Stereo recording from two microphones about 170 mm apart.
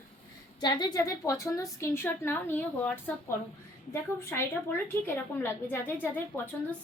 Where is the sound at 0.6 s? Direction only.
25° left (ahead or behind).